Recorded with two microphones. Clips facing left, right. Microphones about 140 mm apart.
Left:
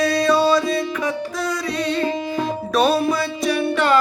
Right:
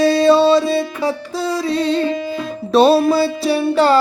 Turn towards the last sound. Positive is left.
turn(degrees=-30)  # may be behind; listen again after turning